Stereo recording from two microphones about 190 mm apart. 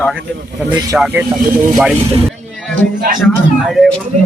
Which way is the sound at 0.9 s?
5° right (ahead or behind).